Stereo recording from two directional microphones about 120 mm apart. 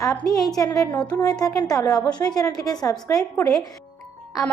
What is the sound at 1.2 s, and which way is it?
A woman's voice, 35° left (ahead or behind).